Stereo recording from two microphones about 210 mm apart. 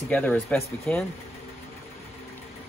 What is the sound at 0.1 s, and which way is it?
Speech, 5° left (ahead or behind).